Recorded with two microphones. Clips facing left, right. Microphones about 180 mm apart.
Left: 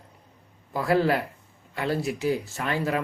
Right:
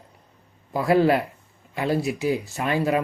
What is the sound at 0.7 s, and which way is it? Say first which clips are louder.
Speech: right 4 dB; 15° right (ahead or behind).